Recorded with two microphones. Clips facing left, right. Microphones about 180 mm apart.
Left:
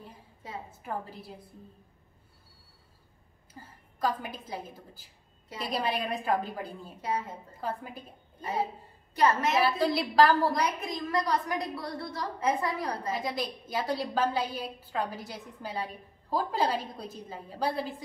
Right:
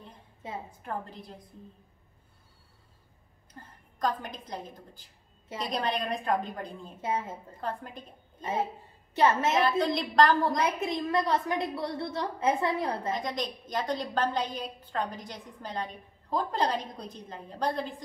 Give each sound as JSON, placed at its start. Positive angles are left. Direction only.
{"t": 0.7, "sound": "a woman's voice", "side_deg": 5}
{"t": 3.5, "sound": "a woman's voice", "side_deg": 5}
{"t": 7.0, "sound": "a woman's voice", "side_deg": -25}
{"t": 7.6, "sound": "a woman's voice", "side_deg": 5}
{"t": 9.6, "sound": "a woman's voice", "side_deg": 5}
{"t": 10.6, "sound": "a woman's voice", "side_deg": -25}
{"t": 13.1, "sound": "a woman's voice", "side_deg": 5}